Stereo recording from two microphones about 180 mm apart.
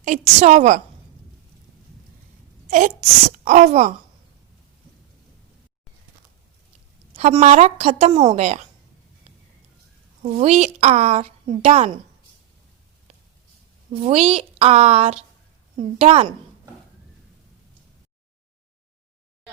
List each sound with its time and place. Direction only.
0.0 s a woman's voice: 45° right (ahead or behind)
2.6 s wail: 45° right (ahead or behind)
3.4 s a woman's voice: 40° right (ahead or behind)
7.2 s a woman's voice: 40° right (ahead or behind)
10.2 s a woman's voice: 35° right (ahead or behind)
13.9 s a woman's voice: 30° right (ahead or behind)